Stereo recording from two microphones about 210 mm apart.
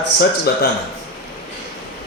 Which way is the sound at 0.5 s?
50° left (ahead or behind).